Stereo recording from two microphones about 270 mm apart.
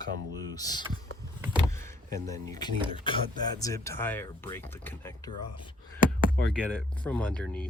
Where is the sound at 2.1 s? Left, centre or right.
Centre.